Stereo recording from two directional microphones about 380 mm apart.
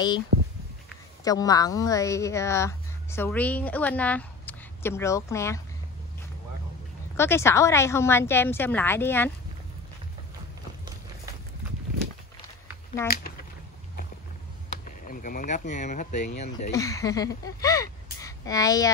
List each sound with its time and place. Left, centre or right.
1.2 s a woman's voice: centre
7.2 s speech: centre
13.0 s speech: centre
14.9 s speech: left